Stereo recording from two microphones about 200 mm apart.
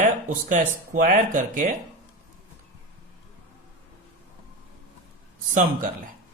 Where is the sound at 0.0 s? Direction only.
40° right (ahead or behind).